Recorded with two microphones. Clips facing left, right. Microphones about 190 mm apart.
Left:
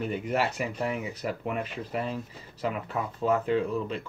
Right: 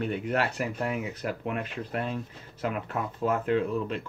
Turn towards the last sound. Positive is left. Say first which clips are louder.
# even
turn(degrees=0)  # may be behind; listen again after turning